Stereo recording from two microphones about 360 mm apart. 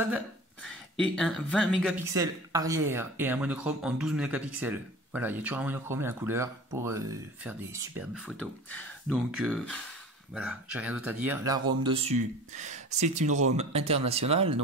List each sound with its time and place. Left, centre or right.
0.7 s speech: centre